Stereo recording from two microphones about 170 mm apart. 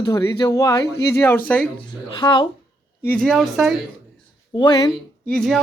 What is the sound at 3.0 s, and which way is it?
Speech, 5° left (ahead or behind).